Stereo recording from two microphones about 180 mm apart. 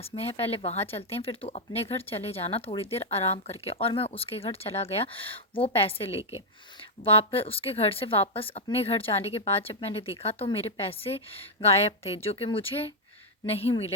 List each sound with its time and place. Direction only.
0.0 s speech: 35° left (ahead or behind)